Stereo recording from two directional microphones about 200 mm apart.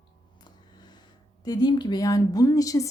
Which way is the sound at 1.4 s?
20° left (ahead or behind).